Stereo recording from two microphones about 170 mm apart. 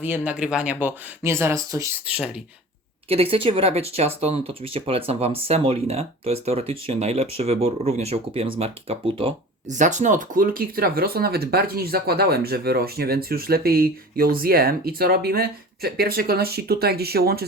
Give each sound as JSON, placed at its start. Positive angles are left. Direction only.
{"t": 0.0, "sound": "speech", "side_deg": -10}
{"t": 2.1, "sound": "speech", "side_deg": -5}
{"t": 3.1, "sound": "speech", "side_deg": -35}
{"t": 9.6, "sound": "speech", "side_deg": -45}